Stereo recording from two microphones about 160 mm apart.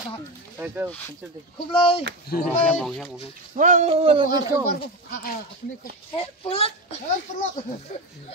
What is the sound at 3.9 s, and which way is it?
Speech, 35° right (ahead or behind).